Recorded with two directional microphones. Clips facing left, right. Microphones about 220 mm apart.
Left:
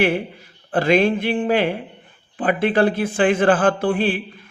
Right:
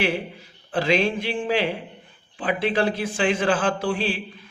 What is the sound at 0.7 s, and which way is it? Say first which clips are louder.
A man's voice: left 5 dB; 55° left (ahead or behind).